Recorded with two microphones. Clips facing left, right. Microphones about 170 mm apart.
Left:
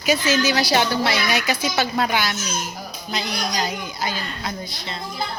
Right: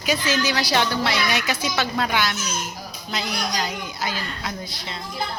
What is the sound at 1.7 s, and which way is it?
Speech, 40° left (ahead or behind).